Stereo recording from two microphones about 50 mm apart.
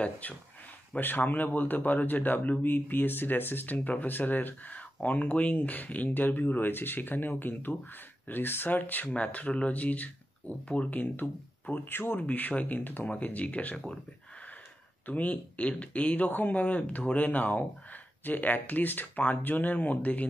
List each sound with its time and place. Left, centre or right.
0.0 s speech: left
0.9 s speech: left
15.0 s speech: left